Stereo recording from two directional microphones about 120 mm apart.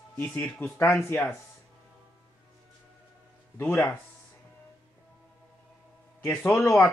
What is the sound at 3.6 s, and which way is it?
Speech, 15° left (ahead or behind).